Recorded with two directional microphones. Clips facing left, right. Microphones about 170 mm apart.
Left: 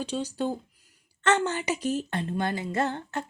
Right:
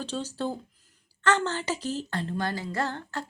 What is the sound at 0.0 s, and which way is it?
A woman's voice, 15° left (ahead or behind).